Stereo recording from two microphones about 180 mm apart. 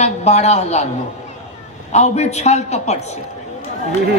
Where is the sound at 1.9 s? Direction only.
40° left (ahead or behind).